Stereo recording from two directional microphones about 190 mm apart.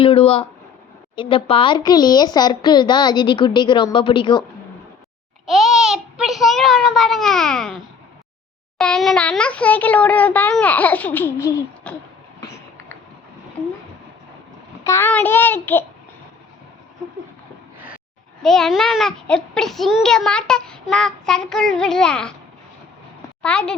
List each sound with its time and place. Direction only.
0.0 s speech: 30° left (ahead or behind)
5.5 s a child's voice: centre (ahead or behind)
8.8 s a child's voice: centre (ahead or behind)
14.8 s a child's voice: 15° left (ahead or behind)
18.4 s a child's voice: centre (ahead or behind)
23.4 s speech: 5° left (ahead or behind)